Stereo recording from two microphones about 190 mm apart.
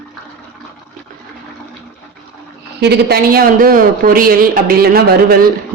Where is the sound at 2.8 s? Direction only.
60° right (ahead or behind).